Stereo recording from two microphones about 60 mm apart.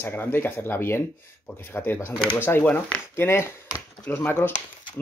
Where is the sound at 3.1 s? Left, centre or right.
Left.